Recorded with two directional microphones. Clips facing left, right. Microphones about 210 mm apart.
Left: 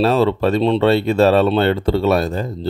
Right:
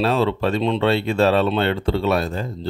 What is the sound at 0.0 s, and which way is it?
Speech, 40° left (ahead or behind).